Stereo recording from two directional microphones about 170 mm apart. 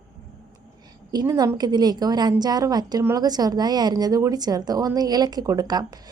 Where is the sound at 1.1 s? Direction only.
25° right (ahead or behind).